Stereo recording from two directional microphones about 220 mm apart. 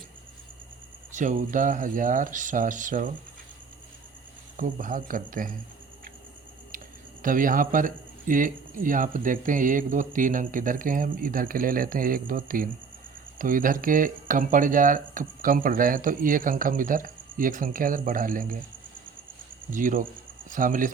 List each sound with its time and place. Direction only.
1.1 s speech: 35° right (ahead or behind)
4.5 s speech: 35° right (ahead or behind)
6.7 s speech: 40° right (ahead or behind)
19.7 s speech: 35° right (ahead or behind)